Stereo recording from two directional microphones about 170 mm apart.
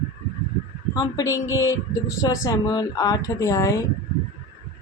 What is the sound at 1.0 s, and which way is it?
Speech, 20° left (ahead or behind).